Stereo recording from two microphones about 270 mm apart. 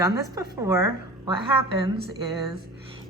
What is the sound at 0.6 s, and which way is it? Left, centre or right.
Speech, centre.